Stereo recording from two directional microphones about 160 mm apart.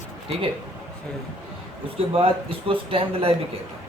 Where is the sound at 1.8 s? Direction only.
35° right (ahead or behind).